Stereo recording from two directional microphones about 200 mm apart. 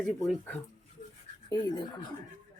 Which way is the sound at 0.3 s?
10° left (ahead or behind).